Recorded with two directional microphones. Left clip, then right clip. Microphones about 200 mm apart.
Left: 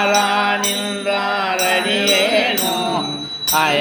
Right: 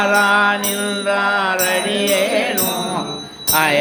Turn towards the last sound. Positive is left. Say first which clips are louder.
# even
turn(degrees=-15)  # may be behind; listen again after turning